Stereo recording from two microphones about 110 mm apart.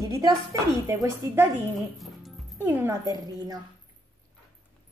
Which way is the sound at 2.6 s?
20° right (ahead or behind).